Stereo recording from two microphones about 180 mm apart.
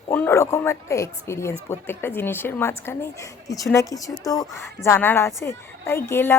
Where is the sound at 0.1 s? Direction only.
15° left (ahead or behind).